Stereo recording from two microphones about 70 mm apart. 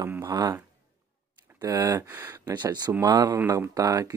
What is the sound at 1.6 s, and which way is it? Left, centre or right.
Speech, right.